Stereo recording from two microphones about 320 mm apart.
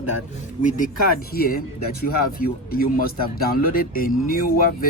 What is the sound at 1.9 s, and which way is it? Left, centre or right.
Speech, left.